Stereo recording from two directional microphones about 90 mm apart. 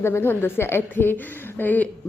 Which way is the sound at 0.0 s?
25° left (ahead or behind).